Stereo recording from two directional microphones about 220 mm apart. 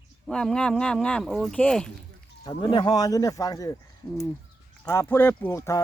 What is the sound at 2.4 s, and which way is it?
Speech, 20° left (ahead or behind).